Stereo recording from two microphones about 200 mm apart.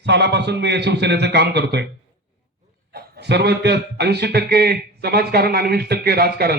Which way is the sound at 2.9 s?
55° right (ahead or behind).